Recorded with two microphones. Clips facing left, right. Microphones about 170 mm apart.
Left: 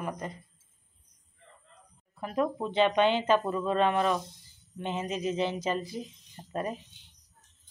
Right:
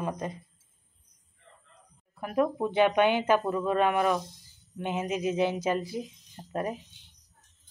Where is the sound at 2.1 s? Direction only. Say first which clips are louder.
Right 3 dB; 10° right (ahead or behind).